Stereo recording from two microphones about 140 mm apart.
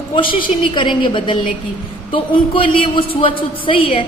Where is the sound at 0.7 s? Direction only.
35° left (ahead or behind).